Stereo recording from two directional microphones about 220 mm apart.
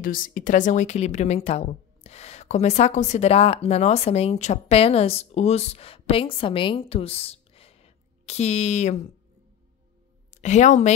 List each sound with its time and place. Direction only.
0.0 s a woman's voice: 40° left (ahead or behind)
10.3 s a woman's voice: 30° left (ahead or behind)